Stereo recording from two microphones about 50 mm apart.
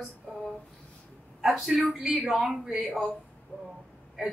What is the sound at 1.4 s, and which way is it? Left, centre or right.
A man's voice, centre.